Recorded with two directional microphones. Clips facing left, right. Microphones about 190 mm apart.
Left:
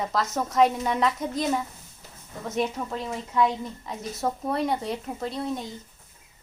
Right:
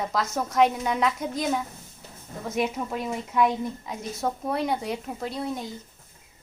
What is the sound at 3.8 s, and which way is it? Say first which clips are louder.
Speech: even; centre (ahead or behind).